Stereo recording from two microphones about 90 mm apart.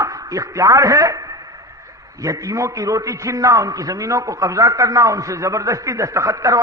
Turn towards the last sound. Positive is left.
turn(degrees=-40)  # may be behind; listen again after turning